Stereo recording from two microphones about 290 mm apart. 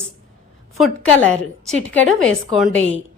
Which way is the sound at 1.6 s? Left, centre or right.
Centre.